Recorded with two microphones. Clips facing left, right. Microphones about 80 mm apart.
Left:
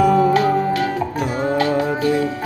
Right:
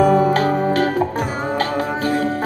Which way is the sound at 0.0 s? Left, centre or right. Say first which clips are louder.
Even; right.